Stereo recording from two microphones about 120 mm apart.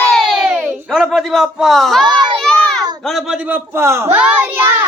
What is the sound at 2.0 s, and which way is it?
Crowd, 35° right (ahead or behind).